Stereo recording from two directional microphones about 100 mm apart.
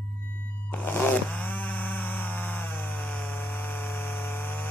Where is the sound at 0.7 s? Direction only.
20° left (ahead or behind).